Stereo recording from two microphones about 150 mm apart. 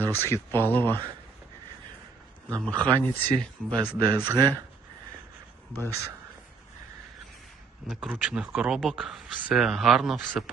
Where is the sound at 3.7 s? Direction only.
30° right (ahead or behind).